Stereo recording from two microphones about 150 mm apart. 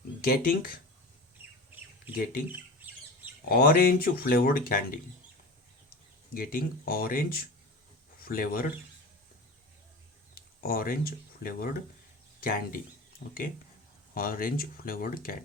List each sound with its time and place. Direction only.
0.2 s speech: 75° left (ahead or behind)
2.5 s squawk: 10° right (ahead or behind)
3.5 s speech: 75° left (ahead or behind)
6.3 s speech: 70° left (ahead or behind)
10.3 s speech: 75° left (ahead or behind)
14.1 s speech: 75° left (ahead or behind)